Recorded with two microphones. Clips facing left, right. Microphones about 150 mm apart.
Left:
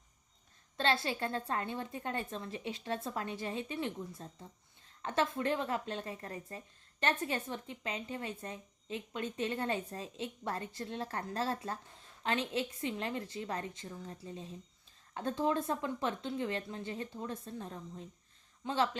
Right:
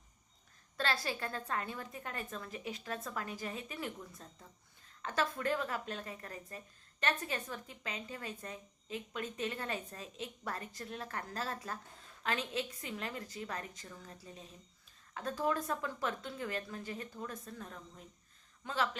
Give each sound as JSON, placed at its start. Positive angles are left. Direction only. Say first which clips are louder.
{"t": 0.8, "sound": "speech", "louder": "left 4 dB", "side_deg": 25}